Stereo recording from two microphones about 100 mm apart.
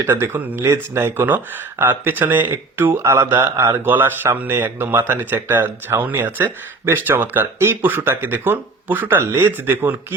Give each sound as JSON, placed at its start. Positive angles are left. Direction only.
{"t": 0.0, "sound": "speech", "side_deg": -20}